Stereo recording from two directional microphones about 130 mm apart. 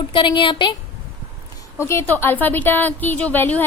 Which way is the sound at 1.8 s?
20° left (ahead or behind).